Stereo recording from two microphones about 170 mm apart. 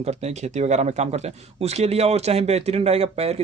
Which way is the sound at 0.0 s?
40° right (ahead or behind).